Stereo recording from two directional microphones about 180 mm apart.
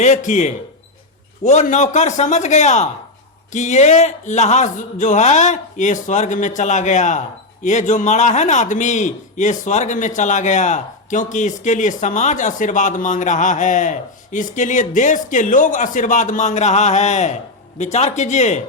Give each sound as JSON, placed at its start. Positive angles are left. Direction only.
{"t": 0.0, "sound": "speech", "side_deg": 40}